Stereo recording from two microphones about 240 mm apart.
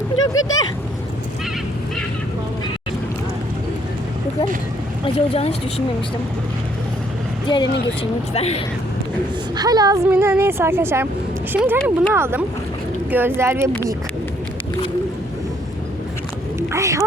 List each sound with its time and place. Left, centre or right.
0.2 s speech: left
5.0 s speech: left
7.4 s speech: centre
9.6 s speech: centre
16.6 s a sound: centre